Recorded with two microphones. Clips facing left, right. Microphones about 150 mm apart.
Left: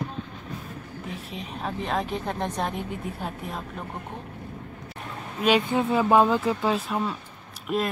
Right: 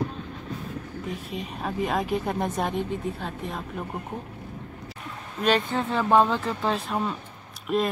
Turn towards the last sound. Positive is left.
turn(degrees=0)  # may be behind; listen again after turning